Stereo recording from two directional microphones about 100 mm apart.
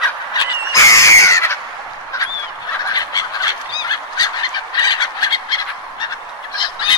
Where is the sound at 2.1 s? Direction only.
30° left (ahead or behind).